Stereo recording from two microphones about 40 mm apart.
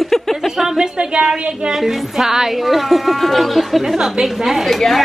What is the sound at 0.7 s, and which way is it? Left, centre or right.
Speech, centre.